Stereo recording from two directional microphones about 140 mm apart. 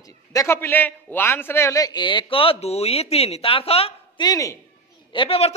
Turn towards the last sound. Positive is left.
turn(degrees=45)  # may be behind; listen again after turning